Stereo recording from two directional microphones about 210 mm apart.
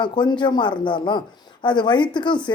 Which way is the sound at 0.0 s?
20° left (ahead or behind).